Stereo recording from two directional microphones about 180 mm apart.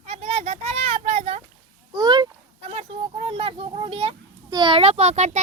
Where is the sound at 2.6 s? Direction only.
35° right (ahead or behind).